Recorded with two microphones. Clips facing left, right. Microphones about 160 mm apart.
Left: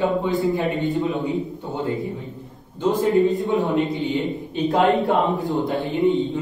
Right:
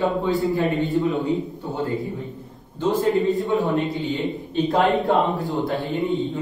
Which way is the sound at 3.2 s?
20° left (ahead or behind).